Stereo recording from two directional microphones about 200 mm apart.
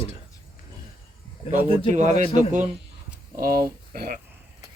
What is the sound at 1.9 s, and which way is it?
Speech, 35° right (ahead or behind).